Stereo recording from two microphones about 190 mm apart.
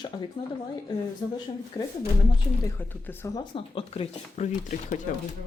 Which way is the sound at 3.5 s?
30° left (ahead or behind).